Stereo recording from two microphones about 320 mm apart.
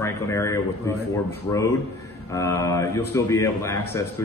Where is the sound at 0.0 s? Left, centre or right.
Centre.